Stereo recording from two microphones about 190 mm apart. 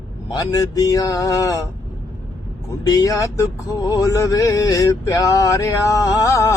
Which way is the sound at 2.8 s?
20° left (ahead or behind).